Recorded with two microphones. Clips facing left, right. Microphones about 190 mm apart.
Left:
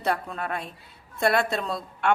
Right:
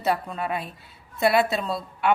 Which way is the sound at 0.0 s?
Centre (ahead or behind).